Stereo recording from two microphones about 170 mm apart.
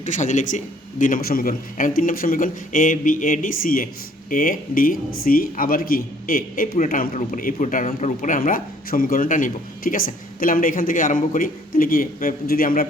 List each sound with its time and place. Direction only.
0.0 s a man's voice: 45° left (ahead or behind)